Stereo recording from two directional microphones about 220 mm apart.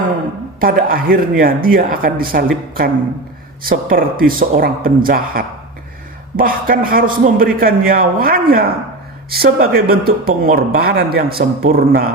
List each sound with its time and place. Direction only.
0.6 s a man's voice: 40° right (ahead or behind)